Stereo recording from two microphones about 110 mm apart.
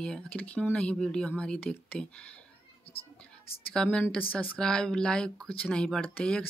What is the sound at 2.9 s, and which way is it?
Speech, 60° left (ahead or behind).